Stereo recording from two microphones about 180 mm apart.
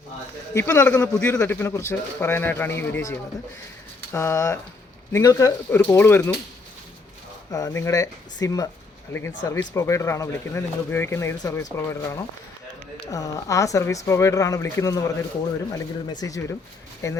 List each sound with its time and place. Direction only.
0.5 s a man's voice: 15° left (ahead or behind)
7.5 s a man's voice: 15° left (ahead or behind)